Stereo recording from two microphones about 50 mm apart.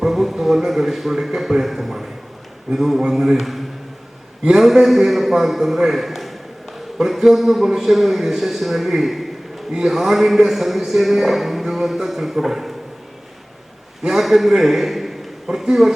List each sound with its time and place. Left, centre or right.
0.0 s a man's voice: centre
14.2 s a man's voice: centre